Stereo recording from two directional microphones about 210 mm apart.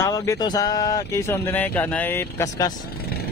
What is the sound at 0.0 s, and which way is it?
A man's voice, 15° left (ahead or behind).